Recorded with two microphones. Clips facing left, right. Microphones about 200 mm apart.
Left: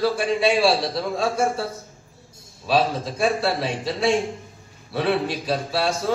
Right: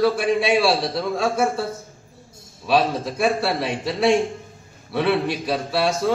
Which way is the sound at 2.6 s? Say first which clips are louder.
Right 1 dB; 60° right (ahead or behind).